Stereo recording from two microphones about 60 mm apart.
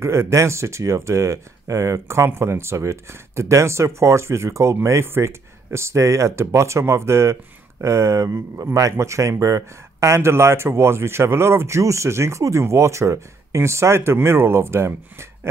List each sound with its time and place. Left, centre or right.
0.0 s speech: right